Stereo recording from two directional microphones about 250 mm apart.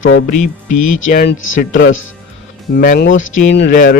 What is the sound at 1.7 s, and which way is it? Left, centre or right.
Speech, left.